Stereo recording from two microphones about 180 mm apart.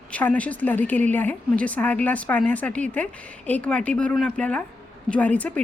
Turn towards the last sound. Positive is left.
turn(degrees=10)  # may be behind; listen again after turning